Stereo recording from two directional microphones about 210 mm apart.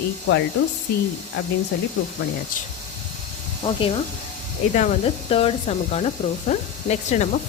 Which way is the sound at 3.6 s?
25° left (ahead or behind).